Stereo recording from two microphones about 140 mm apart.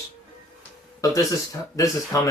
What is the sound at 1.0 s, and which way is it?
Speech, 25° left (ahead or behind).